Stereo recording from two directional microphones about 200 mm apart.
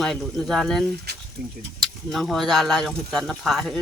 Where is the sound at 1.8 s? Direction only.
Centre (ahead or behind).